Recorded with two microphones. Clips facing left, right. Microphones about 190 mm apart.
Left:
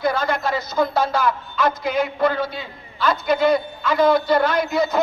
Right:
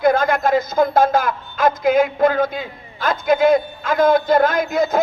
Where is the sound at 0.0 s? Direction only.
50° right (ahead or behind).